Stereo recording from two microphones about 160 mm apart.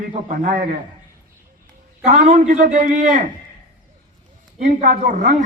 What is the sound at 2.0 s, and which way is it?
Speech, 45° right (ahead or behind).